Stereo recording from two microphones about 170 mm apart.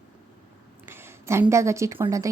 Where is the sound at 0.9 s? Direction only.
15° right (ahead or behind).